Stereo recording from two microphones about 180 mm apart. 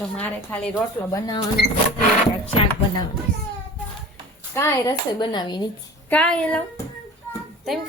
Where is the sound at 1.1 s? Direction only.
20° left (ahead or behind).